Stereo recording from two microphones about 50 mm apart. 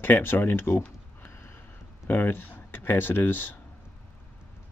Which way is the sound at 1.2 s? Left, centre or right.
Left.